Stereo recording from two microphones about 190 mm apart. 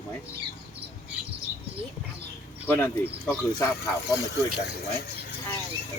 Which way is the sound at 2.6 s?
10° left (ahead or behind).